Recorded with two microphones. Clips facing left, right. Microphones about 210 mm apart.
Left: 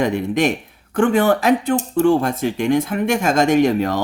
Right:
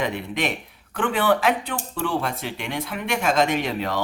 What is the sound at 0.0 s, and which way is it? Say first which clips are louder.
Speech: left 8 dB; 45° left (ahead or behind).